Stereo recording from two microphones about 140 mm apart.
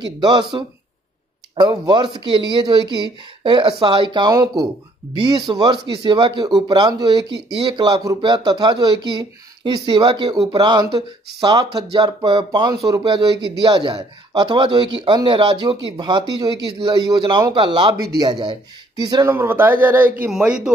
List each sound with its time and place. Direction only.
0.0 s a man's voice: 30° right (ahead or behind)
1.5 s a man's voice: 35° right (ahead or behind)
5.5 s a man's voice: 30° right (ahead or behind)
19.3 s speech: 15° right (ahead or behind)